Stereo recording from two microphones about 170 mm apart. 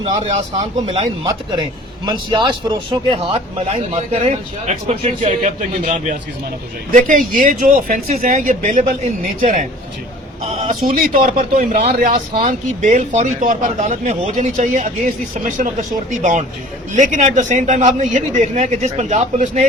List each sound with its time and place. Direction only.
0.0 s speech: 35° right (ahead or behind)
1.0 s a man's voice: 25° right (ahead or behind)
3.7 s speech: 40° right (ahead or behind)
10.7 s speech: 55° right (ahead or behind)
11.6 s speech: 40° right (ahead or behind)
11.9 s speech: 60° right (ahead or behind)
12.4 s speech: 45° right (ahead or behind)